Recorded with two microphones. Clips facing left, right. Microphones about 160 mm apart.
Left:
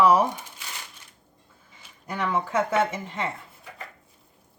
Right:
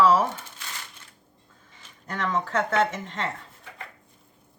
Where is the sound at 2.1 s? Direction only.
10° left (ahead or behind).